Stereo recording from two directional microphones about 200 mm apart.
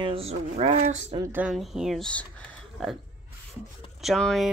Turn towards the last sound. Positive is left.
turn(degrees=0)  # may be behind; listen again after turning